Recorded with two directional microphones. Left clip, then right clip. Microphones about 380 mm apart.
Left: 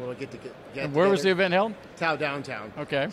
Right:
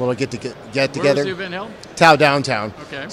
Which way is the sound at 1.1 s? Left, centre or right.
Left.